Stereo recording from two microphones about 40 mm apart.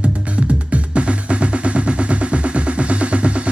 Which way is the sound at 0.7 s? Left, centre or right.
Right.